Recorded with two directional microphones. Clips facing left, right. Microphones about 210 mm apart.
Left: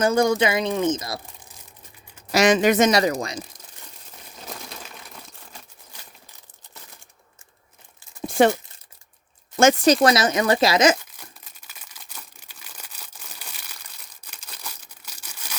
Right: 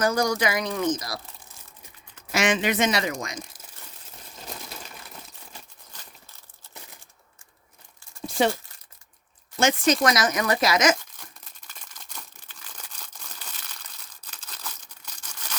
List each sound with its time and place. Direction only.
0.0 s speech: 25° left (ahead or behind)
2.3 s speech: 40° left (ahead or behind)
4.4 s crumpling: centre (ahead or behind)
8.3 s crumpling: 55° left (ahead or behind)
9.6 s speech: 40° left (ahead or behind)
11.6 s crumpling: 5° left (ahead or behind)